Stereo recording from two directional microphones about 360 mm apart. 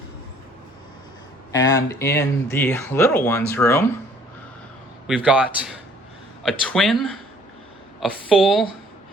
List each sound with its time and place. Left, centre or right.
1.5 s speech: centre
5.0 s speech: centre